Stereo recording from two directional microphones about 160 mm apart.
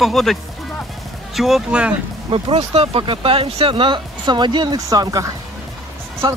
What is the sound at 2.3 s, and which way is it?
Speech, 35° right (ahead or behind).